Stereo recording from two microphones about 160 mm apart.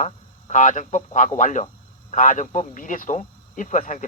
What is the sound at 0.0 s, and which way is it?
Speech, 50° left (ahead or behind).